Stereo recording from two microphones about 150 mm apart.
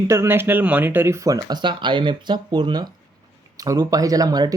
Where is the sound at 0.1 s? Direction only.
15° right (ahead or behind).